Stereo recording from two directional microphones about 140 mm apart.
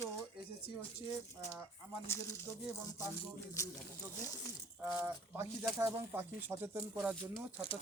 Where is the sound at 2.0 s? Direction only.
20° left (ahead or behind).